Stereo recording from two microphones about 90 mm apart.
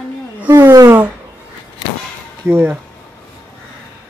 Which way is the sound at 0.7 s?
40° right (ahead or behind).